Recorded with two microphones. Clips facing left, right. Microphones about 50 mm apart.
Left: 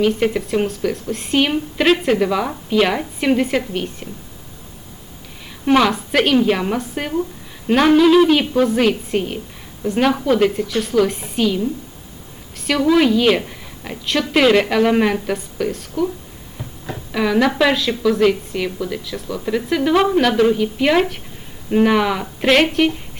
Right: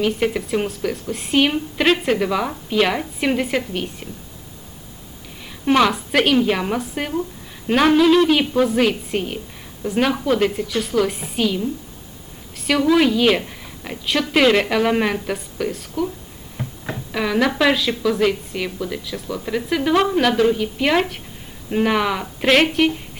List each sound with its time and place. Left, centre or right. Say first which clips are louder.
0.0 s a woman's voice: left 3 dB; centre
5.6 s a woman's voice: left 1 dB; centre
17.1 s a woman's voice: left 3 dB; centre